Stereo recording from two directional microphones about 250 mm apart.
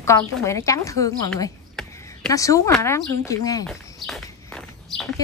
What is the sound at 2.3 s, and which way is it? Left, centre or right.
Speech, centre.